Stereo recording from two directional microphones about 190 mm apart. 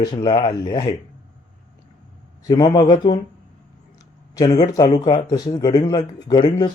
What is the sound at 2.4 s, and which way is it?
Speech, 20° left (ahead or behind).